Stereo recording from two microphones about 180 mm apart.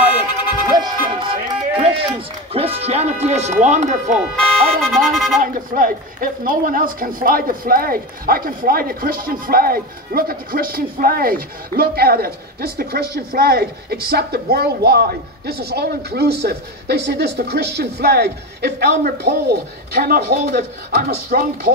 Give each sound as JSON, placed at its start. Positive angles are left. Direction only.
{"t": 0.7, "sound": "run", "side_deg": -25}
{"t": 4.8, "sound": "a sound", "side_deg": 0}
{"t": 5.4, "sound": "speech", "side_deg": -50}